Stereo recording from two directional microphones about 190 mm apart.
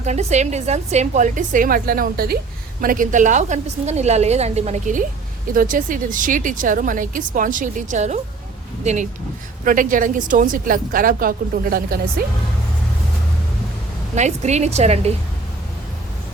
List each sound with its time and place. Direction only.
0.0 s a woman's voice: 35° right (ahead or behind)
14.2 s a woman's voice: 35° right (ahead or behind)